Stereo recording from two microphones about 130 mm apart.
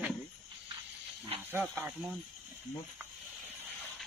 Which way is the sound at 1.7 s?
15° right (ahead or behind).